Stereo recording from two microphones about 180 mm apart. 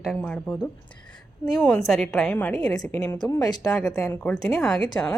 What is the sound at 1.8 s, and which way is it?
A woman's voice, centre (ahead or behind).